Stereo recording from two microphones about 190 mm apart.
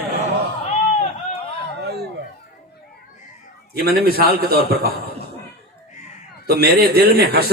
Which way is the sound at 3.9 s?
55° right (ahead or behind).